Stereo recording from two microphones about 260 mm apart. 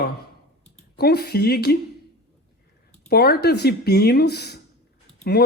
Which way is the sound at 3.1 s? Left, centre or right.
Left.